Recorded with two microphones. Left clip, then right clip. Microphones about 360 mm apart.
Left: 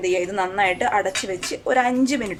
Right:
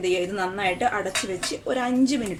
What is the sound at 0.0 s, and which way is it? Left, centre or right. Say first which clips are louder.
A woman's voice: left 3 dB; centre.